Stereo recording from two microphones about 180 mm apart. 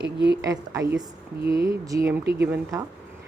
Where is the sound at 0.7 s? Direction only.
20° right (ahead or behind).